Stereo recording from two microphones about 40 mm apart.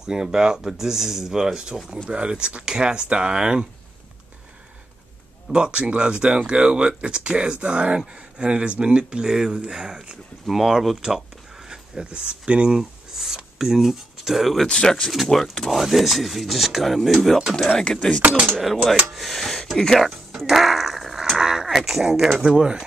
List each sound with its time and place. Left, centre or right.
0.0 s speech: centre
5.5 s speech: right; by 11.0 s centre
11.6 s speech: centre
12.7 s speech: centre
14.7 s speech: centre
15.7 s speech: centre
17.9 s speech: centre
18.2 s speech: right
19.1 s speech: centre
20.1 s a sound: centre
22.4 s speech: centre